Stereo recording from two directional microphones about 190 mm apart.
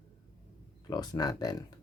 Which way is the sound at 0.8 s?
20° left (ahead or behind).